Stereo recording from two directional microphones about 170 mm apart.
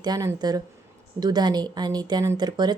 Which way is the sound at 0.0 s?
20° right (ahead or behind).